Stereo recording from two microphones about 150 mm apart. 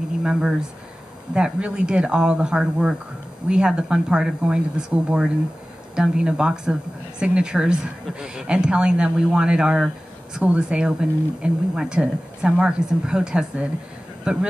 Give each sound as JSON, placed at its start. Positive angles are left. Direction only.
{"t": 0.2, "sound": "speech", "side_deg": -5}